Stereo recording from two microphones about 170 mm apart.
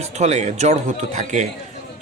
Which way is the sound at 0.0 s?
40° right (ahead or behind).